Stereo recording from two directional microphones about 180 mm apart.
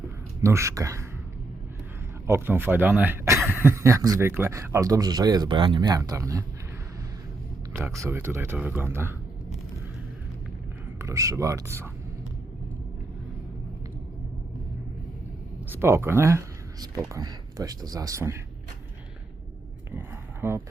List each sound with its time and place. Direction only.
0.4 s speech: 15° right (ahead or behind)
2.2 s speech: 15° right (ahead or behind)
7.7 s speech: 15° right (ahead or behind)
11.0 s speech: 15° right (ahead or behind)
15.7 s speech: 15° right (ahead or behind)
19.9 s a sound: 10° right (ahead or behind)